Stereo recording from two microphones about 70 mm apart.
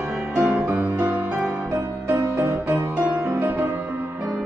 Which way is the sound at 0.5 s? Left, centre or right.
Right.